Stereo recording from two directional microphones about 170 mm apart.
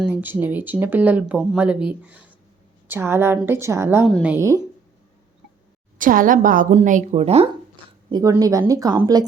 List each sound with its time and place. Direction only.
0.0 s speech: 10° right (ahead or behind)
6.0 s a woman's voice: 55° right (ahead or behind)
8.1 s a woman's voice: 20° right (ahead or behind)